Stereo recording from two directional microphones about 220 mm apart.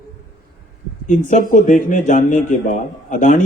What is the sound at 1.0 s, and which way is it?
Speech, 35° left (ahead or behind).